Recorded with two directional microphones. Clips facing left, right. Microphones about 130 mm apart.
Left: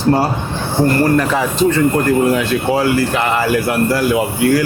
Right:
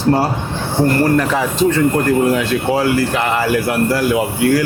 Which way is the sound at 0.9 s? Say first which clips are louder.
Left 1 dB; 20° left (ahead or behind).